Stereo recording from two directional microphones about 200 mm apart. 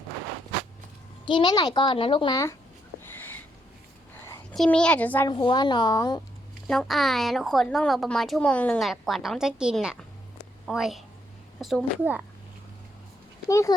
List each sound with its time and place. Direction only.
1.2 s a child's voice: 25° left (ahead or behind)
3.1 s a sound: 10° left (ahead or behind)
4.5 s a woman's voice: 5° left (ahead or behind)
5.3 s a child's voice: 25° left (ahead or behind)
6.7 s a woman's voice: centre (ahead or behind)
13.5 s a child's voice: 15° left (ahead or behind)